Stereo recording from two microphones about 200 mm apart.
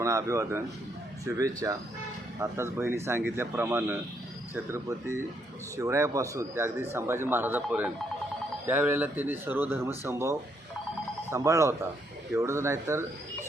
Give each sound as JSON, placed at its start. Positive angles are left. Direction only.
{"t": 0.0, "sound": "speech", "side_deg": -15}